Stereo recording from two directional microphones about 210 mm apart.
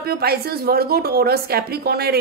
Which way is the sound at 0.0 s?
45° right (ahead or behind).